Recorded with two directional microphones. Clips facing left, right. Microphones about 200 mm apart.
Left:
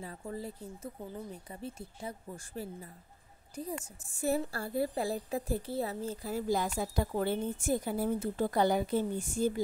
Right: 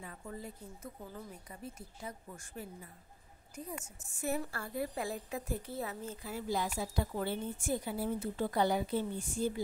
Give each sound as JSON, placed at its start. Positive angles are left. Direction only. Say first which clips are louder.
{"t": 0.0, "sound": "a woman's voice", "louder": "left 5 dB", "side_deg": 35}